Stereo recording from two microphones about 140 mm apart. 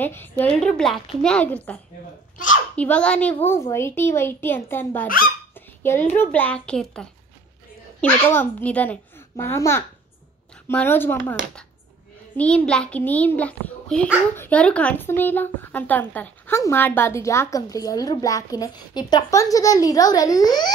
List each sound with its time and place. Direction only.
0.0 s a child's voice: 15° left (ahead or behind)
0.6 s a woman's voice: 5° left (ahead or behind)
2.3 s a child's voice: 70° left (ahead or behind)
2.7 s a child's voice: 10° left (ahead or behind)
12.4 s a child's voice: 5° left (ahead or behind); by 20.7 s 30° left (ahead or behind)